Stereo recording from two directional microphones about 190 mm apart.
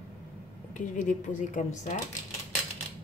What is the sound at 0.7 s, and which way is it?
A woman's voice, 40° left (ahead or behind).